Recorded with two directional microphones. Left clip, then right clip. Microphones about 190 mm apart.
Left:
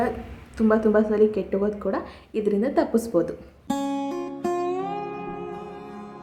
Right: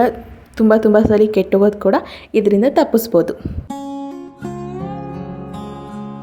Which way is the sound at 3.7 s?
Centre (ahead or behind).